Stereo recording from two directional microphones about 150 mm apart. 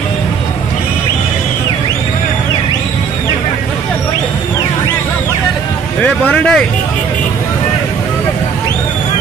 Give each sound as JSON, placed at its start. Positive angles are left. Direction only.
{"t": 6.0, "sound": "speech", "side_deg": 5}